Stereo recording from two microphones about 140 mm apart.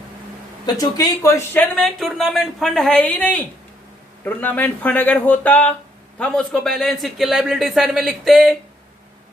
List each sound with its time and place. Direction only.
0.6 s speech: 25° left (ahead or behind)
1.7 s speech: centre (ahead or behind)